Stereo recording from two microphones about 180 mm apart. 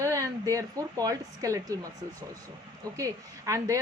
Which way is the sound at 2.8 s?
20° right (ahead or behind).